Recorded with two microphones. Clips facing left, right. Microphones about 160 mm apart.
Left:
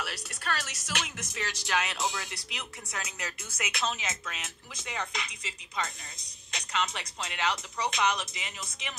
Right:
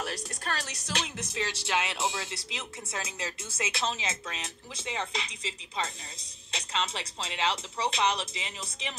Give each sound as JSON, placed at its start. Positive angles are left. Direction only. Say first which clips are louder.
{"t": 0.0, "sound": "speech", "louder": "right 2 dB", "side_deg": -40}